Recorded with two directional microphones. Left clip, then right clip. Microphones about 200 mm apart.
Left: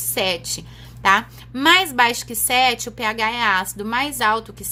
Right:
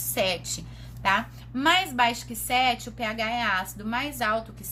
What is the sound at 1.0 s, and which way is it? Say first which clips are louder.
A woman's voice: left 8 dB; 45° left (ahead or behind).